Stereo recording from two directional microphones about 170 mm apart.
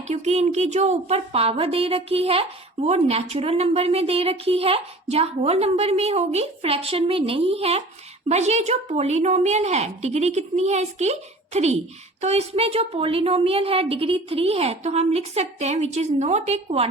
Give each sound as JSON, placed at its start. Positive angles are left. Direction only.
{"t": 0.1, "sound": "a woman's voice", "side_deg": -40}